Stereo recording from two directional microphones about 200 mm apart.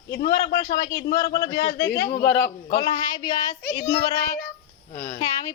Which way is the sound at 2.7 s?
20° left (ahead or behind).